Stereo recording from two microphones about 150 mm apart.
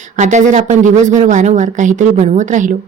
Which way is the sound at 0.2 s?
55° right (ahead or behind).